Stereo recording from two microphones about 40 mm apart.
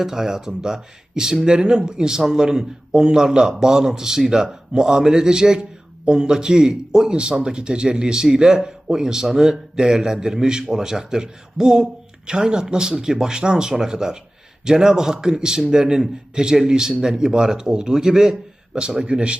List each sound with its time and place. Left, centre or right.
0.0 s a man's voice: centre